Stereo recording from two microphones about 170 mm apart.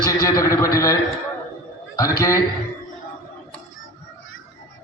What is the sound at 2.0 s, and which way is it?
Speech, 20° left (ahead or behind).